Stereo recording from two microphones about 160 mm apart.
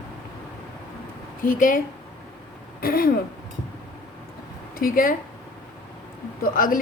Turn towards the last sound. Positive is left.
turn(degrees=60)  # may be behind; listen again after turning